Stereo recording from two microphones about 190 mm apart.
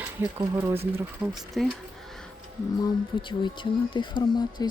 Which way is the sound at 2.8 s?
25° left (ahead or behind).